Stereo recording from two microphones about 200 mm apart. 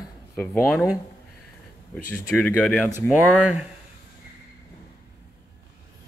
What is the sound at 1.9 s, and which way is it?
Speech, 10° left (ahead or behind).